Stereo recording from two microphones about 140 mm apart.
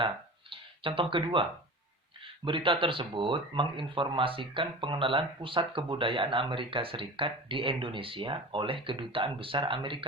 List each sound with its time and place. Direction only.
0.5 s speech: 40° right (ahead or behind)